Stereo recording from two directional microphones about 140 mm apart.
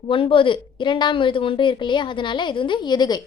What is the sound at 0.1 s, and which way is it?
A woman's voice, 40° left (ahead or behind).